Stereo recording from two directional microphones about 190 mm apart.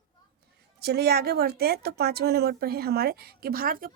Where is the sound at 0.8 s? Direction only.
55° right (ahead or behind).